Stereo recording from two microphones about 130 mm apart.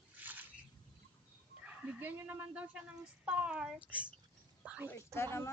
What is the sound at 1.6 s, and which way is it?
Speech, 10° right (ahead or behind).